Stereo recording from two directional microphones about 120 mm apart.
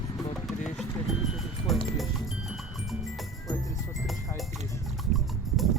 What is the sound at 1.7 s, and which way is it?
Speech, centre (ahead or behind).